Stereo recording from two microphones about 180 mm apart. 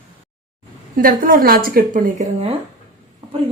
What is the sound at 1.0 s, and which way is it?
A woman's voice, 50° right (ahead or behind).